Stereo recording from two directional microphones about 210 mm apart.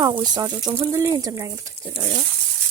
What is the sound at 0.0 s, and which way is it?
Speech, 20° right (ahead or behind).